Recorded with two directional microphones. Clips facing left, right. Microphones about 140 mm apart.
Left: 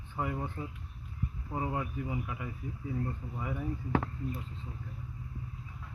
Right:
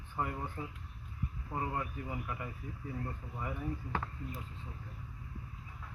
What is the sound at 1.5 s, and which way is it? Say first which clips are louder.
Speech: left 3 dB; 5° left (ahead or behind).